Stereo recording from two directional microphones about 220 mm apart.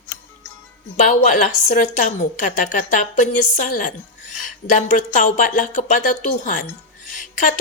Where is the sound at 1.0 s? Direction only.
30° left (ahead or behind).